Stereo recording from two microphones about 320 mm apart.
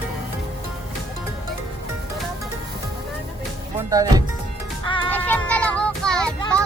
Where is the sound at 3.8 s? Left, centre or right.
Centre.